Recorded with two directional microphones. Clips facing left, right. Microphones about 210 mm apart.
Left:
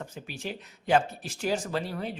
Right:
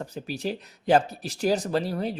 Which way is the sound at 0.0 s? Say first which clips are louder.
Right 7 dB; 35° right (ahead or behind).